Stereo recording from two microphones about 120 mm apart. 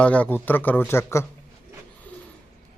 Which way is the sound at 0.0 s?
10° left (ahead or behind).